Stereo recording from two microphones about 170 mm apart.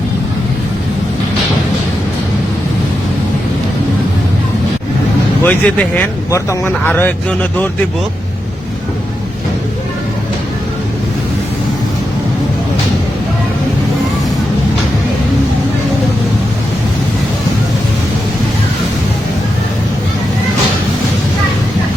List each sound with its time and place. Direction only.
5.4 s speech: 10° left (ahead or behind)